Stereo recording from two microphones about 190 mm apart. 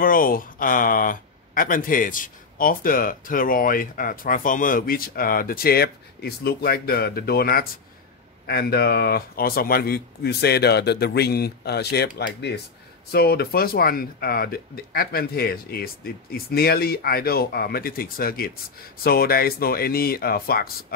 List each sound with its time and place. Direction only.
0.0 s speech: 50° left (ahead or behind)